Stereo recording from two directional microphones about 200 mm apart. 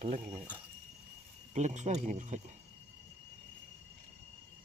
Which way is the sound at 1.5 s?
35° right (ahead or behind).